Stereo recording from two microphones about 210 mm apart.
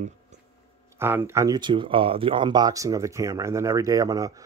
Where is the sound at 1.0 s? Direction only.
10° right (ahead or behind).